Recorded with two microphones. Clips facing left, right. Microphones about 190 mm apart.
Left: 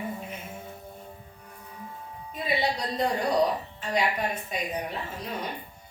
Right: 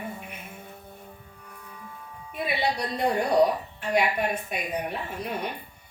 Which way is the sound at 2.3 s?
60° right (ahead or behind).